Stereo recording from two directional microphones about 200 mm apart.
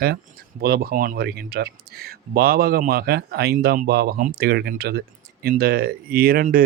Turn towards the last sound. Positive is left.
turn(degrees=-45)  # may be behind; listen again after turning